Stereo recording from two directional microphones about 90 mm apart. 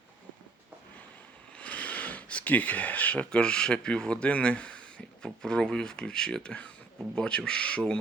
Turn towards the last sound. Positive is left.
turn(degrees=10)  # may be behind; listen again after turning